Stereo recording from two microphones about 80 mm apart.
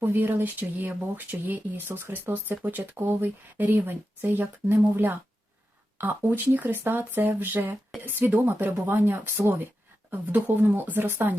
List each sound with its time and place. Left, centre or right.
0.0 s speech: right